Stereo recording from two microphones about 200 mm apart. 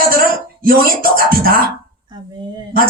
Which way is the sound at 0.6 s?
45° right (ahead or behind).